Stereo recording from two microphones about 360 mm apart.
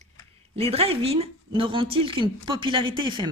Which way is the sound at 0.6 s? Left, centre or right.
Centre.